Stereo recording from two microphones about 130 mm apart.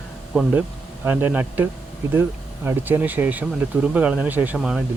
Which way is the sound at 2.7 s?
15° right (ahead or behind).